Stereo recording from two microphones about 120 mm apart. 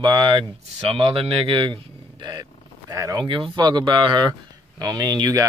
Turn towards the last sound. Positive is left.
turn(degrees=-30)  # may be behind; listen again after turning